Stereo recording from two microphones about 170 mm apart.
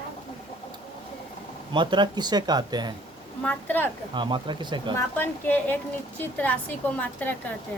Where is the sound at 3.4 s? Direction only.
10° left (ahead or behind).